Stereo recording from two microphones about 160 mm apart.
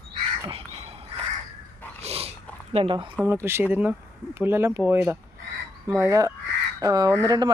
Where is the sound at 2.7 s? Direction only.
35° right (ahead or behind).